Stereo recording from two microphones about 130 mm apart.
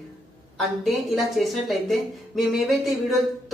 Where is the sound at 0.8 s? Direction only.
Centre (ahead or behind).